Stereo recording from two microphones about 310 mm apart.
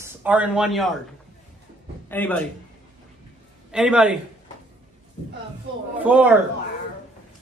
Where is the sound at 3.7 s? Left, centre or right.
Centre.